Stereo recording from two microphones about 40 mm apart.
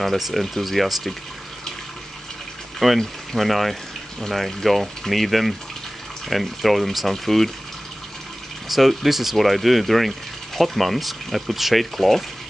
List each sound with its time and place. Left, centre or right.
0.0 s speech: centre
2.8 s speech: centre
8.6 s speech: centre